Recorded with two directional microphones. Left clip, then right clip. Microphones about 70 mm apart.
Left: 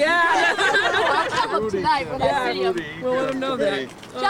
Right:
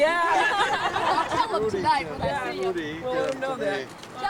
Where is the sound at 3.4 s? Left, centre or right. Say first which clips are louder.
Left 5 dB; centre.